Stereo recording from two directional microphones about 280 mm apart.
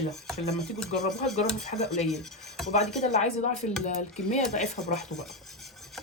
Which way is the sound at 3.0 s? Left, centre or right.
Left.